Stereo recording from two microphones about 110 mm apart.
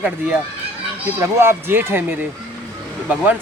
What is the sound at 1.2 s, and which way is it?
Speech, 20° right (ahead or behind).